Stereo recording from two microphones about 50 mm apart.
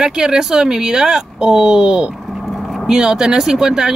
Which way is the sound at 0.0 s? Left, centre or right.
Centre.